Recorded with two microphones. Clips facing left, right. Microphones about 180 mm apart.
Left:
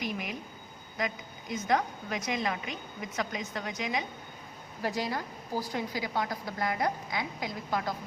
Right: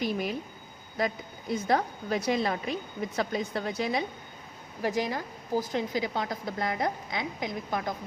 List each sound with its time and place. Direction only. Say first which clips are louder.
0.0 s a woman's voice: right 5 dB; 35° right (ahead or behind)
4.8 s a woman's voice: right 3 dB; 20° right (ahead or behind)